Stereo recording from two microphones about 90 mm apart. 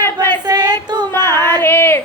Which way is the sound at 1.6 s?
25° left (ahead or behind).